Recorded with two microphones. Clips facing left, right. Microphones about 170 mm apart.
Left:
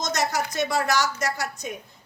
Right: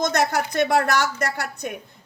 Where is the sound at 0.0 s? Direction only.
60° right (ahead or behind).